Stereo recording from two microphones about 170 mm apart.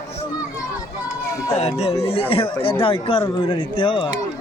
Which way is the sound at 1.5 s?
40° left (ahead or behind).